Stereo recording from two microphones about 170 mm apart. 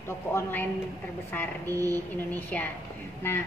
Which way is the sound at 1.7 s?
20° right (ahead or behind).